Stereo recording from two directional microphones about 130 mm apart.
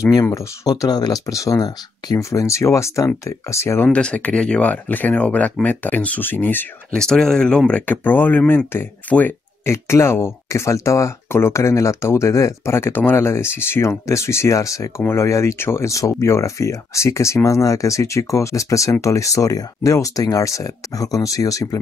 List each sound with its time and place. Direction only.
0.0 s speech: 25° left (ahead or behind)